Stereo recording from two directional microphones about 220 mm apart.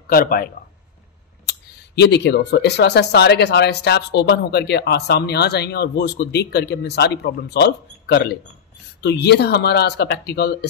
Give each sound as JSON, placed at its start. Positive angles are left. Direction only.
{"t": 0.1, "sound": "speech", "side_deg": 40}
{"t": 1.5, "sound": "speech", "side_deg": 50}